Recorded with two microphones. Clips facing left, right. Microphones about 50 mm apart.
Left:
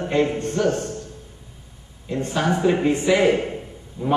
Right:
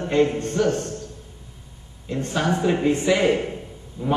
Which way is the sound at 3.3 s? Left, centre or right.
Centre.